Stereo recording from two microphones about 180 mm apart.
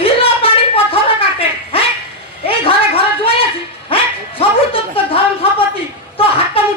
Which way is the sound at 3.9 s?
30° left (ahead or behind).